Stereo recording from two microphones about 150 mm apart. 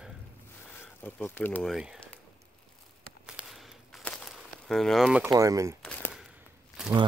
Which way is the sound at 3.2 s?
5° right (ahead or behind).